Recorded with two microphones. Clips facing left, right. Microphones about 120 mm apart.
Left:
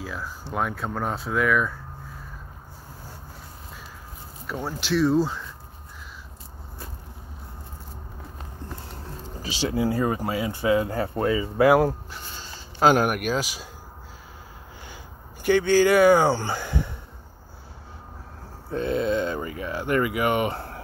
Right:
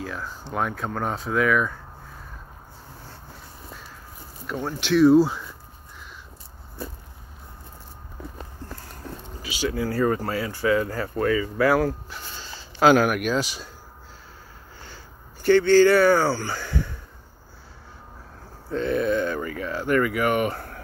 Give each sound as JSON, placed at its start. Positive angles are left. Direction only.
{"t": 0.0, "sound": "speech", "side_deg": 0}
{"t": 4.5, "sound": "speech", "side_deg": 5}
{"t": 9.4, "sound": "speech", "side_deg": 30}
{"t": 13.2, "sound": "speech", "side_deg": 5}
{"t": 15.4, "sound": "speech", "side_deg": 10}
{"t": 18.7, "sound": "speech", "side_deg": 20}